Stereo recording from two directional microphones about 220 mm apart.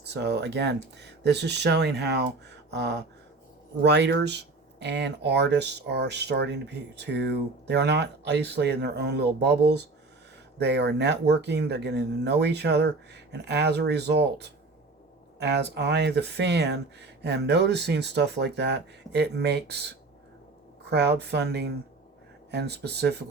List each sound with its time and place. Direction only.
0.0 s speech: 50° right (ahead or behind)
20.9 s speech: 50° right (ahead or behind)